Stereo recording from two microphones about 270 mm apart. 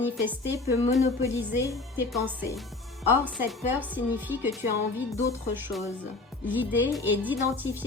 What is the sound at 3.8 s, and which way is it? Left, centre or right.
Speech, centre.